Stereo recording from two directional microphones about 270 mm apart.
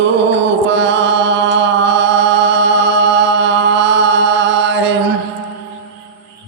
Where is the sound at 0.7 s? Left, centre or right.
Right.